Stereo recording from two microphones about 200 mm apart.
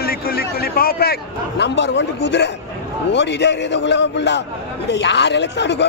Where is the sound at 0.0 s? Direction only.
50° left (ahead or behind).